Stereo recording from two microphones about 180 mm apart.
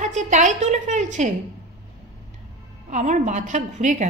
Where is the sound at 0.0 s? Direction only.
40° right (ahead or behind).